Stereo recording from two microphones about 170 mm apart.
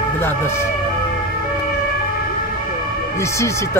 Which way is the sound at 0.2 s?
15° left (ahead or behind).